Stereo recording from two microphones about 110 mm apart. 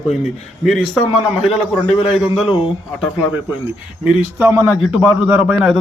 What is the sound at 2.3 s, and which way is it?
Speech, 50° left (ahead or behind).